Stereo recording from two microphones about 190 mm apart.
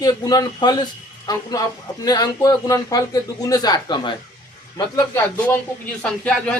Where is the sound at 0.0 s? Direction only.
20° left (ahead or behind).